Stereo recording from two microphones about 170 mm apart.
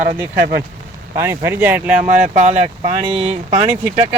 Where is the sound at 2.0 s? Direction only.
45° right (ahead or behind).